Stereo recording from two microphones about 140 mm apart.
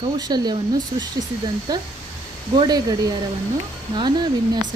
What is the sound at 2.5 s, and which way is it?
A woman's voice, 30° right (ahead or behind).